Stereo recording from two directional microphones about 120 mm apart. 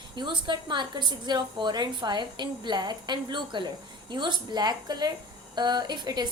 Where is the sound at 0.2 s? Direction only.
40° right (ahead or behind).